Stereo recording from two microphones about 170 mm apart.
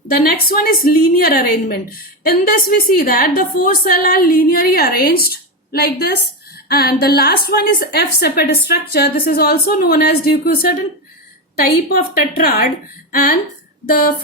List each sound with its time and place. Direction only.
0.1 s a woman's voice: 60° left (ahead or behind)
11.9 s a woman's voice: 60° left (ahead or behind)
13.8 s a woman's voice: 60° left (ahead or behind)